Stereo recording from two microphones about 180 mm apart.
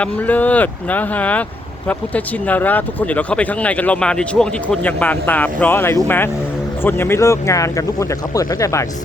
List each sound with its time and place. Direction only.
0.0 s speech: 10° left (ahead or behind)